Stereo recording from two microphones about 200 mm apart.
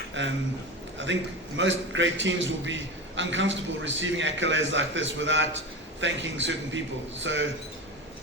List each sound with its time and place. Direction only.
0.2 s a man's voice: 65° right (ahead or behind)